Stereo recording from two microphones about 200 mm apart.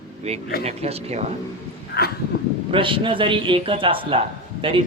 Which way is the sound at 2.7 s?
25° right (ahead or behind).